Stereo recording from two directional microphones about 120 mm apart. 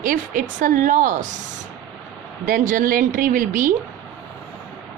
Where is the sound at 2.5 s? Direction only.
90° right.